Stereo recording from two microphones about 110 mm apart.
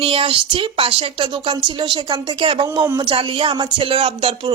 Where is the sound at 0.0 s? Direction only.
55° right (ahead or behind).